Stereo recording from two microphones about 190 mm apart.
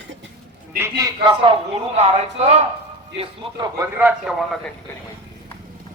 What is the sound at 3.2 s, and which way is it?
Speech, 20° right (ahead or behind).